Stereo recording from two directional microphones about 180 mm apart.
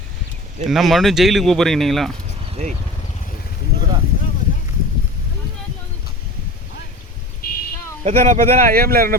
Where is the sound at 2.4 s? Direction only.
35° right (ahead or behind).